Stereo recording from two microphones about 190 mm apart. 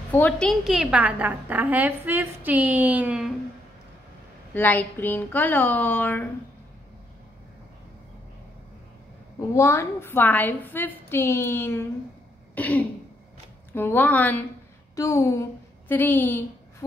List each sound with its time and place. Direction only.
0.1 s a woman's voice: 5° left (ahead or behind)
4.6 s a woman's voice: 10° left (ahead or behind)
9.6 s a woman's voice: 15° left (ahead or behind)
12.5 s throat clearing: 10° left (ahead or behind)
13.7 s a woman's voice: 10° left (ahead or behind)